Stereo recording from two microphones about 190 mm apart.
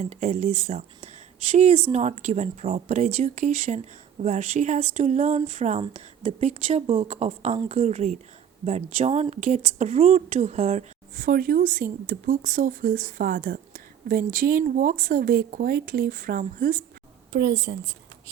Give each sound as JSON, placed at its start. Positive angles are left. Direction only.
{"t": 0.0, "sound": "a woman's voice", "side_deg": -40}
{"t": 17.3, "sound": "a woman's voice", "side_deg": -70}